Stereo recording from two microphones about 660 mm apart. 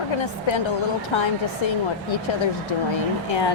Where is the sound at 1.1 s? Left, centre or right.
Left.